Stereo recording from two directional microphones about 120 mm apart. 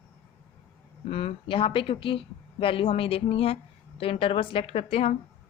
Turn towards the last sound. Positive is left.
turn(degrees=55)  # may be behind; listen again after turning